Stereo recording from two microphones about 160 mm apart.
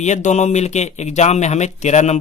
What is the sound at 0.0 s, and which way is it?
Speech, 45° left (ahead or behind).